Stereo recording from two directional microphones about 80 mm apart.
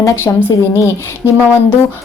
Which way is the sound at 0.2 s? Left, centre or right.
Left.